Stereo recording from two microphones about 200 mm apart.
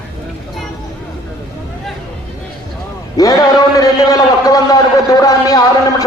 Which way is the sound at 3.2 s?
15° left (ahead or behind).